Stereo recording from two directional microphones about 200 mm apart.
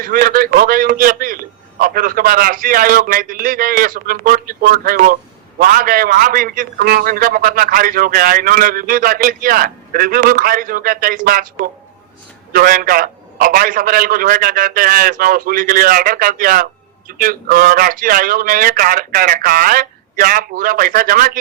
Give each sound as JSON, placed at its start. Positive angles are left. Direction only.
{"t": 0.0, "sound": "a man's voice", "side_deg": -45}